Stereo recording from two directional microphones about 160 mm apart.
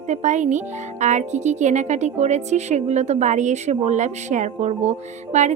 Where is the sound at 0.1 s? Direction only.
45° right (ahead or behind).